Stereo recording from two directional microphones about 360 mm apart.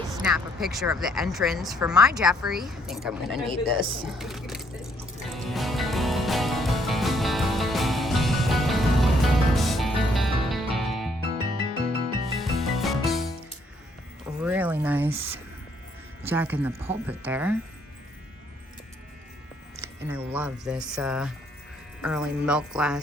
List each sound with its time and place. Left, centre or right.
0.2 s a woman's voice: centre
3.8 s speech: centre
4.1 s music: centre
12.3 s music: centre
14.4 s a sound: centre
16.2 s a woman's voice: centre
19.8 s a woman's voice: centre